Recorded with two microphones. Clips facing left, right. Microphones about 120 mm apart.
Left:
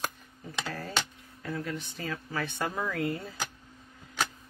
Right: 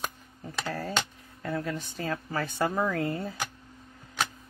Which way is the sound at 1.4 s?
40° right (ahead or behind).